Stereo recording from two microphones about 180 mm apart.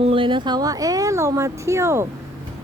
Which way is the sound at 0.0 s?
30° right (ahead or behind).